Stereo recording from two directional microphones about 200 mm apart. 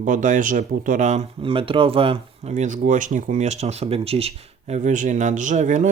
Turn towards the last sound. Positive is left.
turn(degrees=-40)  # may be behind; listen again after turning